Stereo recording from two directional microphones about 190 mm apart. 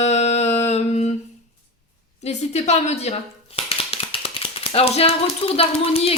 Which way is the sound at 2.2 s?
35° left (ahead or behind).